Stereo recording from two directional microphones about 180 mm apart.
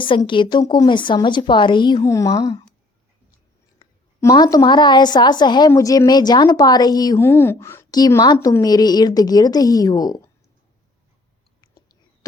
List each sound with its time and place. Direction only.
0.0 s a woman's voice: 25° left (ahead or behind)
3.8 s a woman's voice: 20° left (ahead or behind)
11.6 s whispering: 25° left (ahead or behind)